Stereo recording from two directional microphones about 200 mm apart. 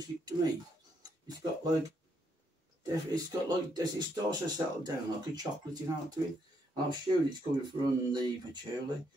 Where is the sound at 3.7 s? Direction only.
20° right (ahead or behind).